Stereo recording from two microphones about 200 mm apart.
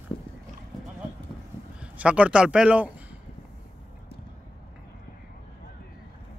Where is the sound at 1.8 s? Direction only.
5° right (ahead or behind).